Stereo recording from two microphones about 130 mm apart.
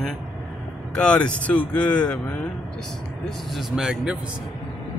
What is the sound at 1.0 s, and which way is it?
Speech, 10° left (ahead or behind).